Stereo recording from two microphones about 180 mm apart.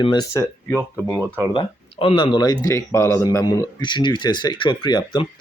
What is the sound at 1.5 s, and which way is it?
Speech, 30° left (ahead or behind).